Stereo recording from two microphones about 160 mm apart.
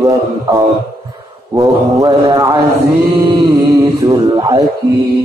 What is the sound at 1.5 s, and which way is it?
Mantra, 20° right (ahead or behind).